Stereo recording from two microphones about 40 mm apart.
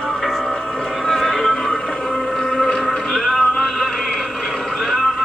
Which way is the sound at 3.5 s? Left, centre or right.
Centre.